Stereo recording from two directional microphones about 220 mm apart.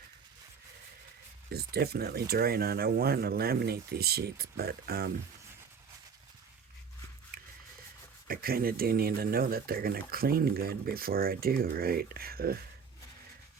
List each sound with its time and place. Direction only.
1.5 s speech: 45° right (ahead or behind)
8.3 s speech: 45° right (ahead or behind)